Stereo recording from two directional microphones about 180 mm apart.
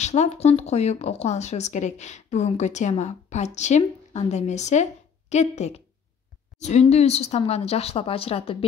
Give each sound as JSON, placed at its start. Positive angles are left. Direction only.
{"t": 0.0, "sound": "speech", "side_deg": 40}
{"t": 6.5, "sound": "a sound", "side_deg": 0}
{"t": 6.9, "sound": "speech", "side_deg": 35}